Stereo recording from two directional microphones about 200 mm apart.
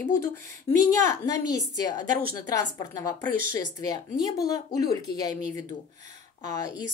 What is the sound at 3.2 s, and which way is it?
Speech, 45° right (ahead or behind).